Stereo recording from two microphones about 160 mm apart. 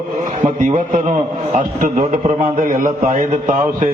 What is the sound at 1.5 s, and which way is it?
A man's voice, 50° right (ahead or behind).